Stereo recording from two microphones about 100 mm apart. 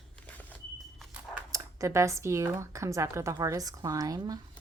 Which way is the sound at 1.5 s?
30° right (ahead or behind).